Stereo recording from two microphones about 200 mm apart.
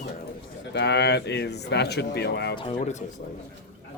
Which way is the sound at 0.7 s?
55° left (ahead or behind).